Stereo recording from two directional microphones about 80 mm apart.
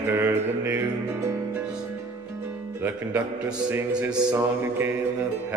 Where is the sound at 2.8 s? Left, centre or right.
Right.